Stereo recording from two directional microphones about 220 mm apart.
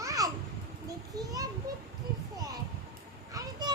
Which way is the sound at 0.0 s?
15° right (ahead or behind).